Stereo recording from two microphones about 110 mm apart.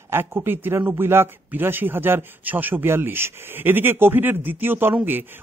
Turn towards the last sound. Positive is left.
turn(degrees=-20)  # may be behind; listen again after turning